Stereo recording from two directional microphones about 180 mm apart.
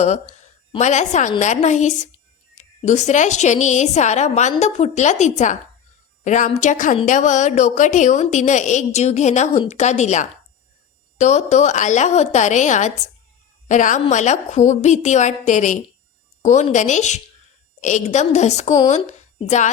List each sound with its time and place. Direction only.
0.8 s a woman's voice: 40° left (ahead or behind)